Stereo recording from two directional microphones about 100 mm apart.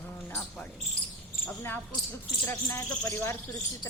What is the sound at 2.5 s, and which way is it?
Speech, 20° left (ahead or behind).